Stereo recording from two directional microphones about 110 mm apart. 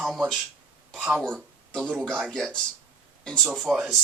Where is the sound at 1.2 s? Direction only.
5° left (ahead or behind).